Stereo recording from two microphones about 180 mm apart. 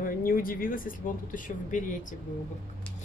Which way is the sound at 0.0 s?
50° left (ahead or behind).